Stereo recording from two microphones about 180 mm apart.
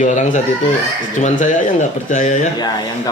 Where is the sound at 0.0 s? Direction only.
45° left (ahead or behind).